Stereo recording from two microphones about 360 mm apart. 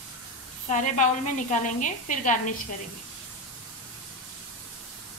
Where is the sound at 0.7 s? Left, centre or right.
Centre.